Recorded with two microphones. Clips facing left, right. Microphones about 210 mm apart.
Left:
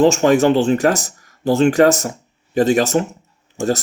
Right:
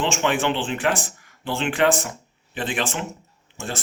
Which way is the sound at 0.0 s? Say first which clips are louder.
Left 10 dB; 40° left (ahead or behind).